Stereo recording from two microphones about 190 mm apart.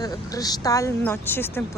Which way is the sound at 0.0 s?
20° left (ahead or behind).